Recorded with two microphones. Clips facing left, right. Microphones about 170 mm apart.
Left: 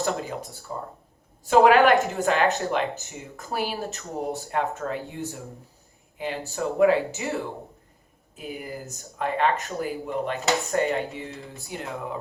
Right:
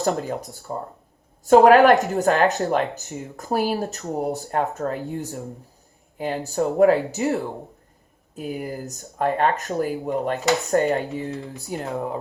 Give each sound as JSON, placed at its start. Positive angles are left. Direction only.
{"t": 0.0, "sound": "speech", "side_deg": -40}